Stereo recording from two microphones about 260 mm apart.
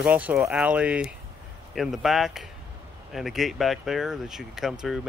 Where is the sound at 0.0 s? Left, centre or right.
Centre.